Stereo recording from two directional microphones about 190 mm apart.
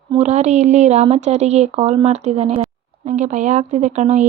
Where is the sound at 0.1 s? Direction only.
35° right (ahead or behind).